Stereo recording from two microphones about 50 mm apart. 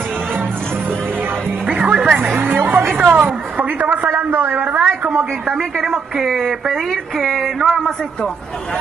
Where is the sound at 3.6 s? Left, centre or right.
Right.